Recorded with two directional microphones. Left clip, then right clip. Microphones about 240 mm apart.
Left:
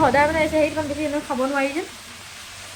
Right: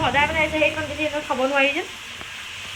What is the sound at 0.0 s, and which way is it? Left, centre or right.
Speech, centre.